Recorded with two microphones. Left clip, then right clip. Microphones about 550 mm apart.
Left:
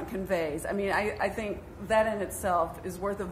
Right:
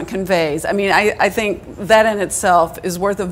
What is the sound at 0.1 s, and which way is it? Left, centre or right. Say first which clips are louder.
A woman's voice: right 14 dB; right.